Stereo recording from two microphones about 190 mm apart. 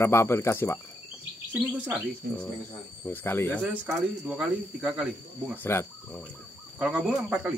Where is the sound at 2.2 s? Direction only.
50° right (ahead or behind).